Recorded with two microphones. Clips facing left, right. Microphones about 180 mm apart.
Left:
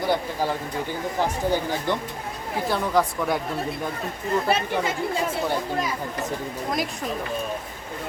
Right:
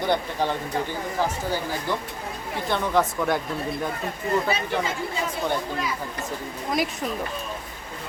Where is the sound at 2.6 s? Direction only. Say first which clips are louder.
Even; centre (ahead or behind).